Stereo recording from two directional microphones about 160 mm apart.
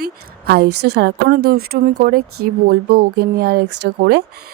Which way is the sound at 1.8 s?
60° right (ahead or behind).